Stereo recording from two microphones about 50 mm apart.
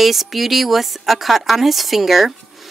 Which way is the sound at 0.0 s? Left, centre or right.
Centre.